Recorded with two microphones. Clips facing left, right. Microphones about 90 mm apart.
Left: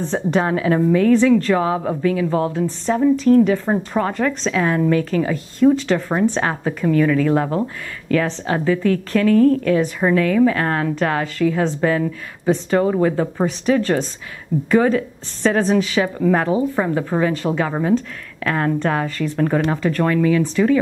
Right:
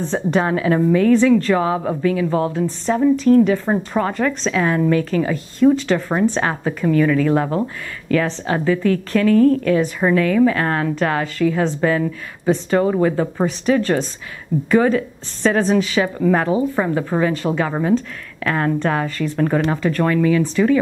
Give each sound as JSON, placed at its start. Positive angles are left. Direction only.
{"t": 0.0, "sound": "a woman's voice", "side_deg": -25}